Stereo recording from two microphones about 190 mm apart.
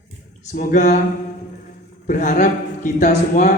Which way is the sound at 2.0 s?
40° left (ahead or behind).